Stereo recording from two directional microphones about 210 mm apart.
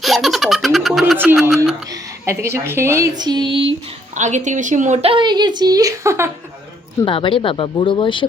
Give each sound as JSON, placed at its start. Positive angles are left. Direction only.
{"t": 0.0, "sound": "baby laughter", "side_deg": 0}
{"t": 1.4, "sound": "speech", "side_deg": 0}
{"t": 1.9, "sound": "a woman's voice", "side_deg": -15}
{"t": 7.0, "sound": "speech", "side_deg": 25}